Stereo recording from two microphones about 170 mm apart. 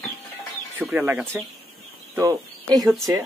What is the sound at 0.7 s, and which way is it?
Speech, 10° right (ahead or behind).